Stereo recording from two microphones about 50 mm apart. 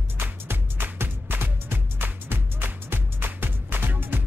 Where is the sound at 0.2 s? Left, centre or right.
Right.